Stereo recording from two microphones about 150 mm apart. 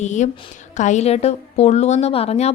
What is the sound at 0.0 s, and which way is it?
A woman's voice, 55° left (ahead or behind).